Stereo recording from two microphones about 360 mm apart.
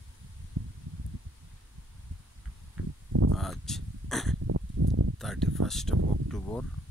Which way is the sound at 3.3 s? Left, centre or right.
Centre.